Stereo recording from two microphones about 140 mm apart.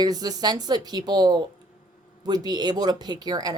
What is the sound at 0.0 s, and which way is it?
A woman's voice, 30° right (ahead or behind).